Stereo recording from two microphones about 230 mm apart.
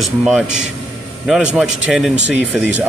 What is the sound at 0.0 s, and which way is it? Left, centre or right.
Speech, centre.